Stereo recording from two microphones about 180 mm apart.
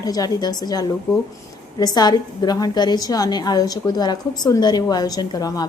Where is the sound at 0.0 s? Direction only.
20° left (ahead or behind).